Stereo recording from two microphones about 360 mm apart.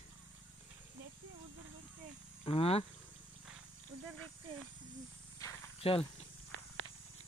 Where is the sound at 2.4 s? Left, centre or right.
Centre.